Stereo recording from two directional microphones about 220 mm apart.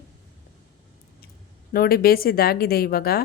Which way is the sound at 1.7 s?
45° left (ahead or behind).